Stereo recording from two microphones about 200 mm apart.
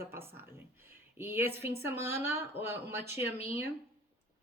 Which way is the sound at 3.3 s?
30° left (ahead or behind).